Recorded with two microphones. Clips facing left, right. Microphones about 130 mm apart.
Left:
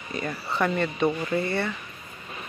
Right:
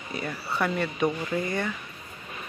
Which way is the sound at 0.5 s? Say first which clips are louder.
Left 2 dB; 10° right (ahead or behind).